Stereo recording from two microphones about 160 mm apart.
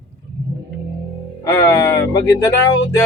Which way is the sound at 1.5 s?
20° left (ahead or behind).